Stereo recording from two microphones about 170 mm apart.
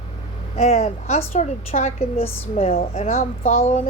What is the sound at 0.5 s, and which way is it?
A woman's voice, 40° left (ahead or behind).